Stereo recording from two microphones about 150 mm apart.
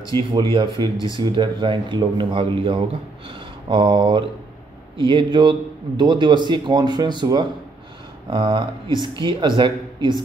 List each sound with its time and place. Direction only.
0.3 s a man's voice: 30° right (ahead or behind)